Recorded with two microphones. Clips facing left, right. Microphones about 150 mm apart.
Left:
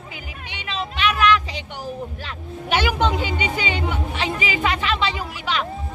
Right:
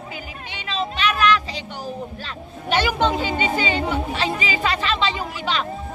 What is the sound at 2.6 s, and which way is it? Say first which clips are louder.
Music: right 1 dB; 10° left (ahead or behind).